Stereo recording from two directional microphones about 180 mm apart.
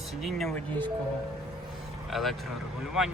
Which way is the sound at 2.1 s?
Centre (ahead or behind).